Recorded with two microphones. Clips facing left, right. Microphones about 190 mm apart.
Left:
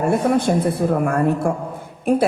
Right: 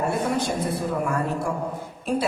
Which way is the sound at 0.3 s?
55° left (ahead or behind).